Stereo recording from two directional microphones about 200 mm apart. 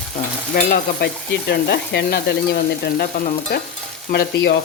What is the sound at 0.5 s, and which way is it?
Stir, 55° left (ahead or behind).